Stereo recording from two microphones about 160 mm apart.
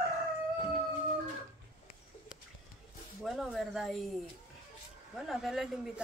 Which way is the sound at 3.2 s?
Centre (ahead or behind).